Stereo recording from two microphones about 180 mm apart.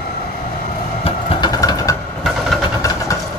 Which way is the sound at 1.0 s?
30° left (ahead or behind).